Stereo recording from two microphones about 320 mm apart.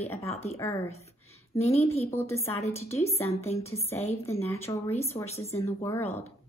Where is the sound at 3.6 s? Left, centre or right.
Centre.